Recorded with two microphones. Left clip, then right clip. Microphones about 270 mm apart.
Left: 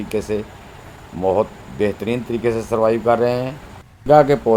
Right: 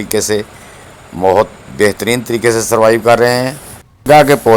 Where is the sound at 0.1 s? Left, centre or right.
Right.